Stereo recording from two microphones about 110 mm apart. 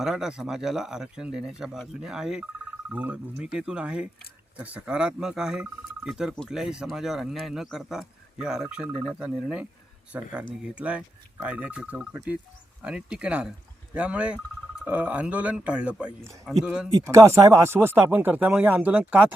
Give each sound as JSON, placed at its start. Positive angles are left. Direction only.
{"t": 0.0, "sound": "speech", "side_deg": -5}
{"t": 17.0, "sound": "speech", "side_deg": -30}